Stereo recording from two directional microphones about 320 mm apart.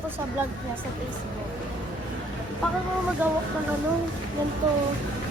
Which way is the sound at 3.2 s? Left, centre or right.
Centre.